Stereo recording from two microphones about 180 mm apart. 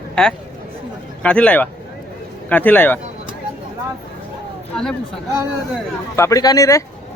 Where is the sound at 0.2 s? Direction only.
5° left (ahead or behind).